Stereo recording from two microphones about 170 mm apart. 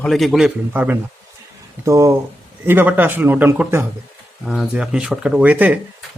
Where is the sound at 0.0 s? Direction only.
Centre (ahead or behind).